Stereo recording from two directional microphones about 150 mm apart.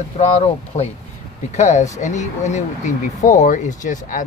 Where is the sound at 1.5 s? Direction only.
50° left (ahead or behind).